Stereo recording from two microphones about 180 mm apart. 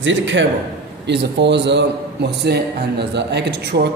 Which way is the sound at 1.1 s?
70° right (ahead or behind).